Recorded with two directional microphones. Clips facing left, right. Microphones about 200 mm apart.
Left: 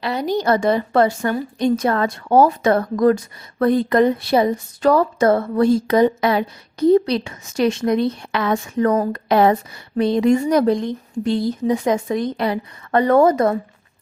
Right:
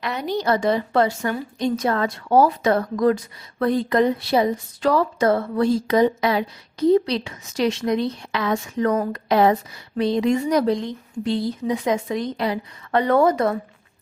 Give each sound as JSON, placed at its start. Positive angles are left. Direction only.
{"t": 0.0, "sound": "a woman's voice", "side_deg": 35}